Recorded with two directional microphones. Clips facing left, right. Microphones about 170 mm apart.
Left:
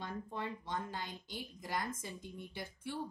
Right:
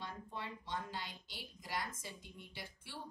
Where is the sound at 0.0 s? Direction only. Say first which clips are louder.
Left 5 dB; 50° left (ahead or behind).